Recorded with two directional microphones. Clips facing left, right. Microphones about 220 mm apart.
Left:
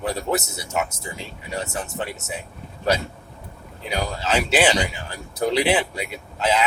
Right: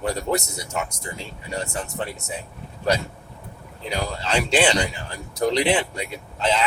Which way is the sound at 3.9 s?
5° left (ahead or behind).